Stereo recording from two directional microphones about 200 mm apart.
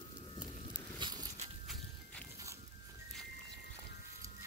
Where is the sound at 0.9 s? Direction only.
20° right (ahead or behind).